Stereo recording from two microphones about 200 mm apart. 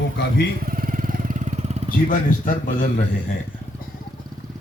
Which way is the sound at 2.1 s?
40° left (ahead or behind).